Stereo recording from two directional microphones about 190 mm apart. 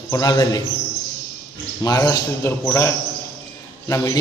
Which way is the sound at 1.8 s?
20° left (ahead or behind).